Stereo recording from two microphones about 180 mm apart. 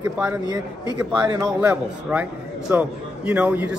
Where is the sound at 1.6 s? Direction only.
10° right (ahead or behind).